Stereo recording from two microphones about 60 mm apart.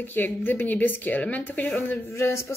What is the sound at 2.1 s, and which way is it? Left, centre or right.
Speech, left.